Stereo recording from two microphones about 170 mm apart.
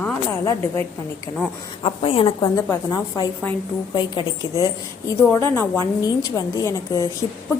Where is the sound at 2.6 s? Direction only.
20° left (ahead or behind).